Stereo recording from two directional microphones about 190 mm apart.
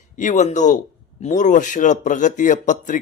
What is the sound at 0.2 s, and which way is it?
A man's voice, 40° left (ahead or behind).